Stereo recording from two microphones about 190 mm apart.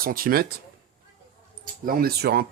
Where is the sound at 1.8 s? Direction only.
50° right (ahead or behind).